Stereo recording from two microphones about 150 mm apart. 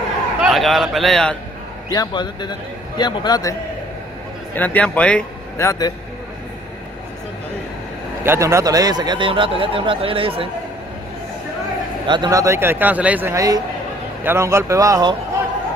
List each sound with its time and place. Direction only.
0.4 s a man's voice: centre (ahead or behind)
1.9 s a man's voice: 30° left (ahead or behind)
4.6 s a man's voice: 10° left (ahead or behind)
5.6 s a man's voice: 25° left (ahead or behind)
8.2 s a man's voice: 15° right (ahead or behind); by 10.5 s 35° right (ahead or behind)
12.1 s a man's voice: 25° right (ahead or behind); by 13.3 s 10° right (ahead or behind)
13.3 s a man's voice: 20° right (ahead or behind)